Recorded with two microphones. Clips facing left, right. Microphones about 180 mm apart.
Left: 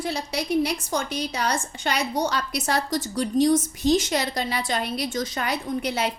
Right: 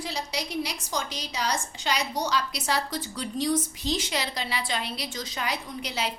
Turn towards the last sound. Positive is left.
turn(degrees=55)  # may be behind; listen again after turning